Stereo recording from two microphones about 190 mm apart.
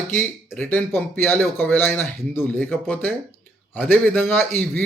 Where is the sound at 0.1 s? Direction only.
10° left (ahead or behind).